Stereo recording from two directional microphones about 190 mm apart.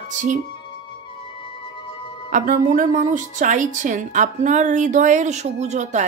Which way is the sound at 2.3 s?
45° right (ahead or behind).